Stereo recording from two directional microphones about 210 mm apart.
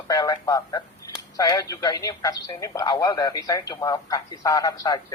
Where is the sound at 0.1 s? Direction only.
15° left (ahead or behind).